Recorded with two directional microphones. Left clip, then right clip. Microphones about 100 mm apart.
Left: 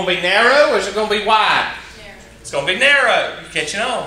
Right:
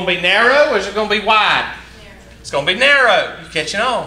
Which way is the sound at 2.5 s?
45° right (ahead or behind).